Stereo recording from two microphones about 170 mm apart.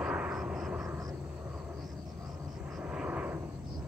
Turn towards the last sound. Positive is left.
turn(degrees=-10)  # may be behind; listen again after turning